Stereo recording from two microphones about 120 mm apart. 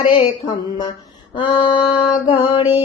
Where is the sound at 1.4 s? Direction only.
40° left (ahead or behind).